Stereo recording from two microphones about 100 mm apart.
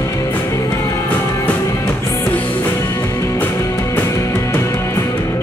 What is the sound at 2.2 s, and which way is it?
Music, 20° left (ahead or behind).